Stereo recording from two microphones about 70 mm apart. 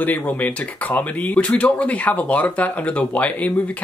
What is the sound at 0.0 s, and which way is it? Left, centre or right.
Speech, left.